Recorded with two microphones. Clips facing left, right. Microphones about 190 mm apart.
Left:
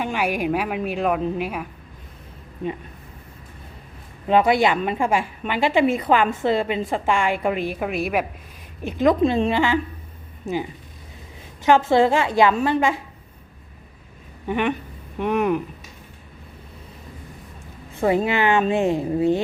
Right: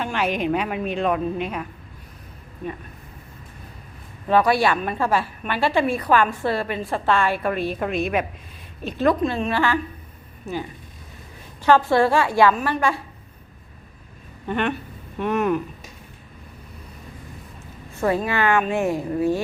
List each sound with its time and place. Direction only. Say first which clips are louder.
0.0 s a woman's voice: even; 10° left (ahead or behind)
4.3 s a woman's voice: left 1 dB; 20° left (ahead or behind)
11.6 s a woman's voice: left 1 dB; 20° left (ahead or behind)
14.4 s a woman's voice: left 1 dB; 10° left (ahead or behind)
18.0 s a woman's voice: left 2 dB; 20° left (ahead or behind)